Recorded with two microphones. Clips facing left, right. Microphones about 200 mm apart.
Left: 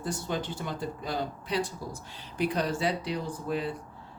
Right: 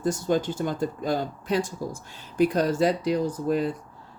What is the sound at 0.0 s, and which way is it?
Speech, 45° right (ahead or behind).